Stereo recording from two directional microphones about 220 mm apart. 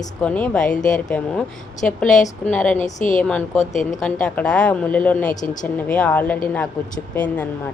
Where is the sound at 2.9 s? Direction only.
35° left (ahead or behind).